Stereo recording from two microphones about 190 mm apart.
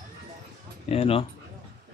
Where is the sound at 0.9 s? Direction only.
30° left (ahead or behind).